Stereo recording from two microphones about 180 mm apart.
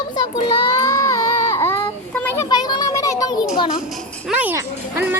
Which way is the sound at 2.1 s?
10° left (ahead or behind).